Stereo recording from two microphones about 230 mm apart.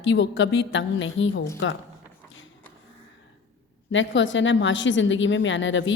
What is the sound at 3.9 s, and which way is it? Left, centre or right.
A woman's voice, left.